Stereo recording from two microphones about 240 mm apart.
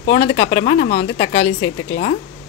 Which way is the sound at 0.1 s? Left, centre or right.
Left.